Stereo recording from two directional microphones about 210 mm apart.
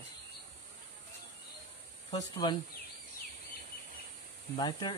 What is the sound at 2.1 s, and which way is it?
Speech, 20° left (ahead or behind).